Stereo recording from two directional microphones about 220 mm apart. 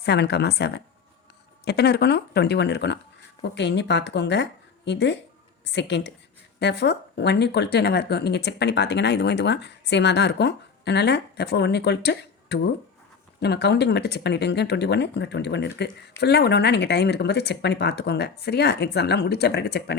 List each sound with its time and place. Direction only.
0.0 s speech: 50° left (ahead or behind)